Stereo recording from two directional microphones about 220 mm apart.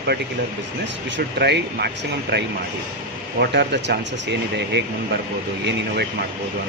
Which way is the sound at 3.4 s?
50° right (ahead or behind).